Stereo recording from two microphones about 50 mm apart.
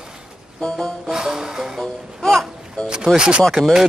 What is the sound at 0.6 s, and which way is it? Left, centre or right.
Music, centre.